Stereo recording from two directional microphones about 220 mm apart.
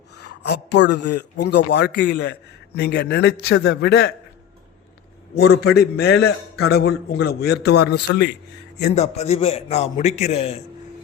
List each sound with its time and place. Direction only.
0.4 s a man's voice: 50° left (ahead or behind)
5.6 s a man's voice: 45° left (ahead or behind)
9.0 s a man's voice: 30° left (ahead or behind)